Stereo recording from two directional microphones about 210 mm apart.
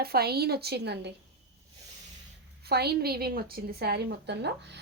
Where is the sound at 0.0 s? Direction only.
50° right (ahead or behind).